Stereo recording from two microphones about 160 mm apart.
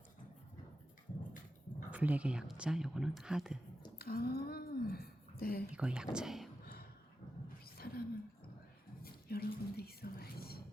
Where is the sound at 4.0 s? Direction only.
70° left (ahead or behind).